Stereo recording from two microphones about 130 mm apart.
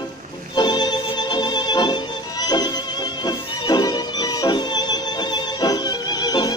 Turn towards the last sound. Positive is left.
turn(degrees=30)  # may be behind; listen again after turning